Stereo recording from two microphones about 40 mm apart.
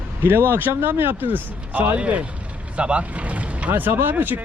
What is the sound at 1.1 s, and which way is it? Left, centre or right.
Speech, right.